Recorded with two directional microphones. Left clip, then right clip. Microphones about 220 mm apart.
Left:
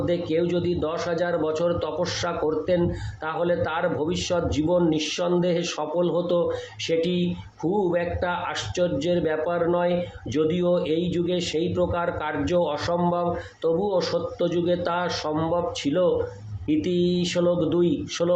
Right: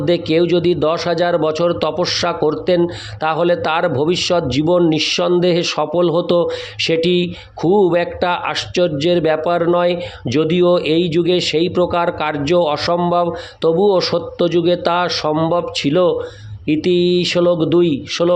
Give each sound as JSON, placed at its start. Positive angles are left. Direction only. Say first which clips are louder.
{"t": 0.0, "sound": "a man's voice", "louder": "right 9 dB", "side_deg": -45}